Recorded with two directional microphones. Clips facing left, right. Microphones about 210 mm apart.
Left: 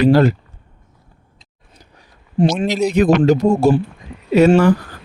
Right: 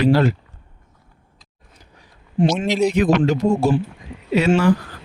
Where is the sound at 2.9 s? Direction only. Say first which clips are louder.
Left 4 dB; 40° left (ahead or behind).